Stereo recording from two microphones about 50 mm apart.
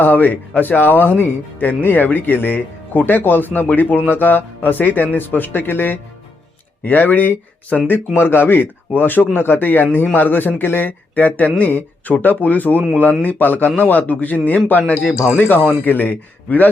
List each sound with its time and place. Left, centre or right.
0.0 s speech: left
7.9 s speech: left